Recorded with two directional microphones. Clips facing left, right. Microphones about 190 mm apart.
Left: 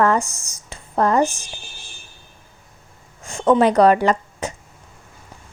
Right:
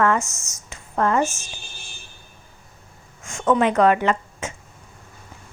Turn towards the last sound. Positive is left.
turn(degrees=35)  # may be behind; listen again after turning